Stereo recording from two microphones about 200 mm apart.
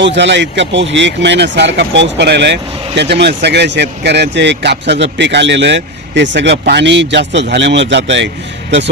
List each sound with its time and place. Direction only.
0.0 s speech: 65° right (ahead or behind)